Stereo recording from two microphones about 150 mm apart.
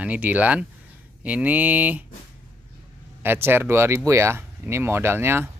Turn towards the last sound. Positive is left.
turn(degrees=-15)  # may be behind; listen again after turning